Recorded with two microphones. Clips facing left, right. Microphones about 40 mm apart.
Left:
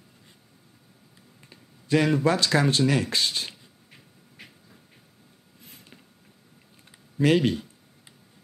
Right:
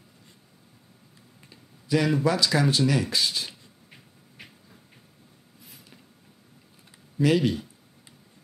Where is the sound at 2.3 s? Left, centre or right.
Left.